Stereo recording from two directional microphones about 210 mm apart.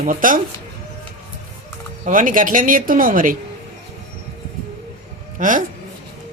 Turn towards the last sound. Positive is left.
turn(degrees=-40)  # may be behind; listen again after turning